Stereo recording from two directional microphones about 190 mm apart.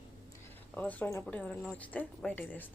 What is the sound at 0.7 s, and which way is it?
A woman's voice, 10° left (ahead or behind).